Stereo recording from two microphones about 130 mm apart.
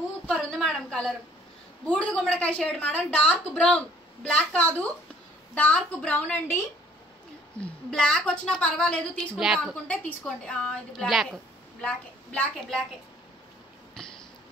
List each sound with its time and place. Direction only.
0.3 s a woman's voice: centre (ahead or behind)
7.6 s a woman's voice: 5° left (ahead or behind)